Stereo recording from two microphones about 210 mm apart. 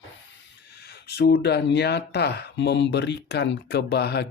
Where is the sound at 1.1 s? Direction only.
50° left (ahead or behind).